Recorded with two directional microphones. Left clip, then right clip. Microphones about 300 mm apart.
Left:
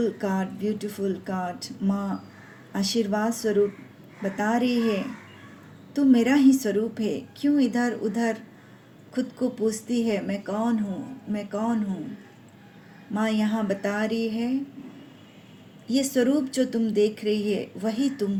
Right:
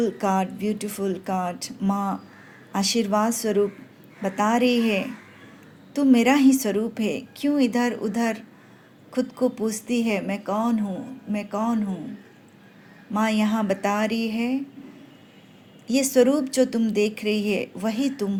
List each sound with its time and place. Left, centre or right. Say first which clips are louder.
0.0 s a woman's voice: right 4 dB; right
13.1 s a woman's voice: right 3 dB; right
15.9 s a woman's voice: right 4 dB; right